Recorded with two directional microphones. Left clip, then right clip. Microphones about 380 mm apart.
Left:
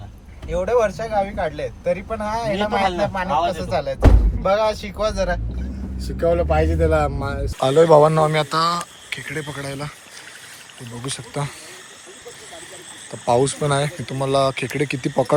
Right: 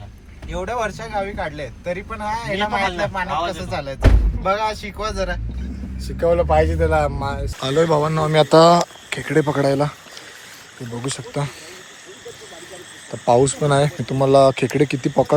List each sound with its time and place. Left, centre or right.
0.5 s speech: centre
8.4 s speech: centre
11.0 s speech: centre
13.1 s speech: centre